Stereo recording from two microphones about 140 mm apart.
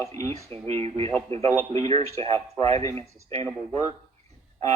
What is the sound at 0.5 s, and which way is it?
Speech, 45° right (ahead or behind).